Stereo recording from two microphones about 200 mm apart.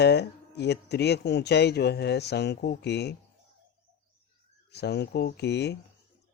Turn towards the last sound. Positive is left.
turn(degrees=55)  # may be behind; listen again after turning